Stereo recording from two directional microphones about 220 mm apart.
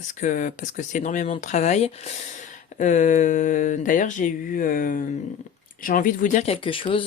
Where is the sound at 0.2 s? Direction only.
35° left (ahead or behind).